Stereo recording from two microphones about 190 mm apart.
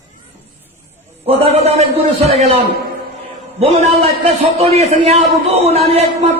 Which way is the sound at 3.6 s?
30° right (ahead or behind).